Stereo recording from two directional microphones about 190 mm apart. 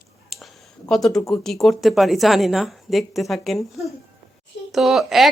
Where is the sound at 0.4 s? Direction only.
Centre (ahead or behind).